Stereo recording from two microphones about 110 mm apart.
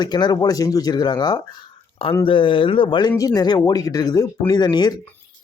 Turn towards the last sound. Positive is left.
turn(degrees=40)  # may be behind; listen again after turning